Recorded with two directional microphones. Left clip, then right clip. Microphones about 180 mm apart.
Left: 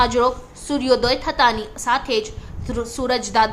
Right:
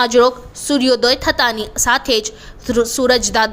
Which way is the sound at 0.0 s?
25° right (ahead or behind).